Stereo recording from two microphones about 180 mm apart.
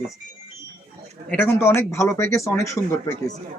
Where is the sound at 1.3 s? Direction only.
10° left (ahead or behind).